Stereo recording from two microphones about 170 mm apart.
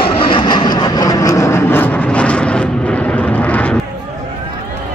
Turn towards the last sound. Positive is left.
turn(degrees=10)  # may be behind; listen again after turning